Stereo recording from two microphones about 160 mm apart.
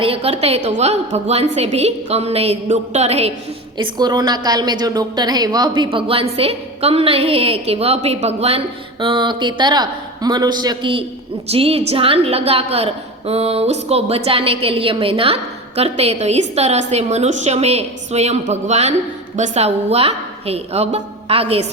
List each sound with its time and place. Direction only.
0.0 s a woman's voice: 35° right (ahead or behind)
3.8 s a woman's voice: 25° right (ahead or behind)